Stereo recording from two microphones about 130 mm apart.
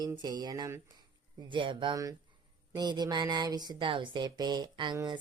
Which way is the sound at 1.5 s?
40° right (ahead or behind).